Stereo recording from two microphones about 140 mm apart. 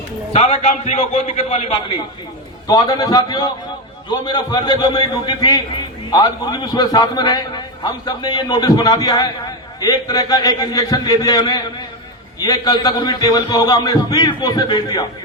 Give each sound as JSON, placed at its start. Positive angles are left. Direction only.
{"t": 0.3, "sound": "a man's voice", "side_deg": 50}
{"t": 2.6, "sound": "a man's voice", "side_deg": 25}